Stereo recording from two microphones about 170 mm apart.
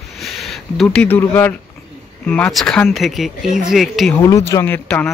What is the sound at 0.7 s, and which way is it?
Speech, 10° left (ahead or behind).